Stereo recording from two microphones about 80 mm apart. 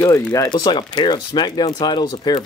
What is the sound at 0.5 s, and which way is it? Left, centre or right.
Speech, left.